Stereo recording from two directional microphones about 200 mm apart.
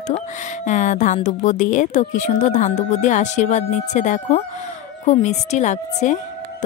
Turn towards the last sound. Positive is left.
turn(degrees=35)  # may be behind; listen again after turning